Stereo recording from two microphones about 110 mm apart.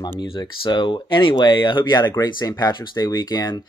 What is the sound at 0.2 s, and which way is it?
Speech, 45° left (ahead or behind).